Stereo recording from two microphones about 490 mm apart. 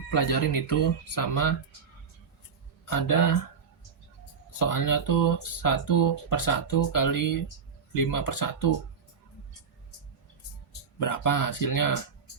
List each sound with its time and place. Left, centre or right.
0.1 s speech: left
2.8 s speech: left
4.5 s speech: left
11.0 s speech: left